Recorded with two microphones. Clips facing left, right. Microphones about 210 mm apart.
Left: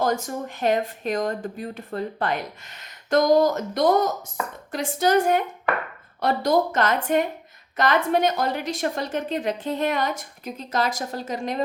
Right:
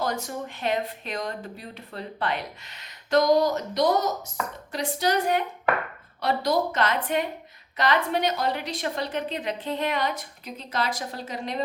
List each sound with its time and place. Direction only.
0.0 s speech: 45° left (ahead or behind)